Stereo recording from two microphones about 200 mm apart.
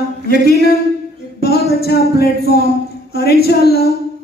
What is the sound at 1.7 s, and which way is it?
A man's voice, 50° left (ahead or behind).